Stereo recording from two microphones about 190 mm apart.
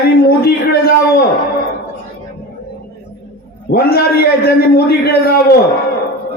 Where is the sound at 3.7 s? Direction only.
55° left (ahead or behind).